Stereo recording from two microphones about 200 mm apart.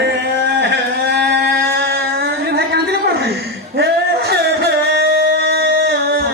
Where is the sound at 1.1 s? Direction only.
55° right (ahead or behind).